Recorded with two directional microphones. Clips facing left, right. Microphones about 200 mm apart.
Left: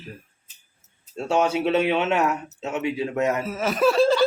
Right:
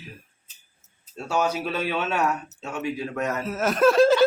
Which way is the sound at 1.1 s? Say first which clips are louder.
Left 3 dB; 25° left (ahead or behind).